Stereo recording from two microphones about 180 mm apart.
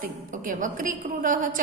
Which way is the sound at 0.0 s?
50° right (ahead or behind).